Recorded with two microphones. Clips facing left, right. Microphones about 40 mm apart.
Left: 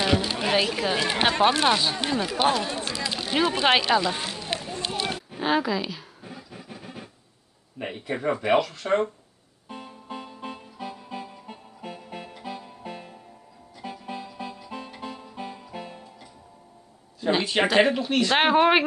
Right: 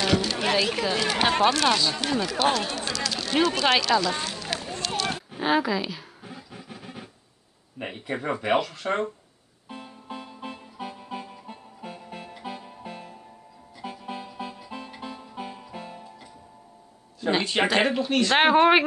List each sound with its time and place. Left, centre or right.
0.0 s a sound: centre
0.7 s speech: centre
4.8 s a sound: left
5.1 s a sound: centre
7.8 s speech: centre
9.7 s music: centre
10.8 s music: centre
11.9 s music: centre
17.2 s speech: centre